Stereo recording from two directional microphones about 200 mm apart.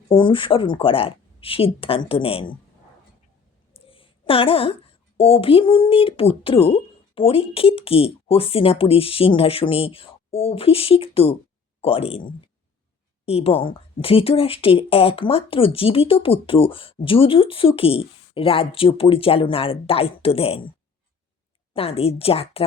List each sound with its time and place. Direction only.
0.1 s a woman's voice: 25° left (ahead or behind)
3.7 s a woman's voice: 25° left (ahead or behind)
13.2 s a woman's voice: 30° left (ahead or behind)
21.7 s a woman's voice: 30° left (ahead or behind)